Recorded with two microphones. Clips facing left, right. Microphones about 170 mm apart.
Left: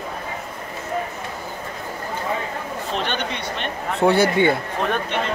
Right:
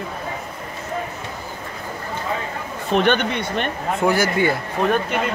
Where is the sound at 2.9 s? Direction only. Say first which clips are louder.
Right 9 dB; 55° right (ahead or behind).